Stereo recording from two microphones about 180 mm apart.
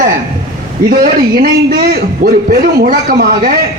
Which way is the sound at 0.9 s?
55° right (ahead or behind).